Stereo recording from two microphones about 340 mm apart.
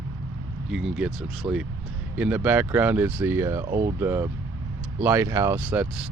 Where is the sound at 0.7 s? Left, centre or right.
Centre.